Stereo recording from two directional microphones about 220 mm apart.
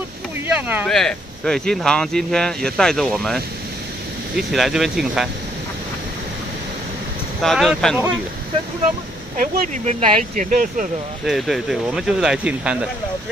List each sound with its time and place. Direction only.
0.5 s speech: 5° right (ahead or behind)
4.4 s speech: centre (ahead or behind)
7.4 s speech: centre (ahead or behind)
9.4 s speech: 35° right (ahead or behind)
11.2 s speech: centre (ahead or behind)